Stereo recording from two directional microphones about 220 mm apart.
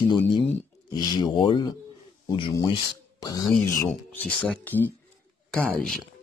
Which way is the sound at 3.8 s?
10° left (ahead or behind).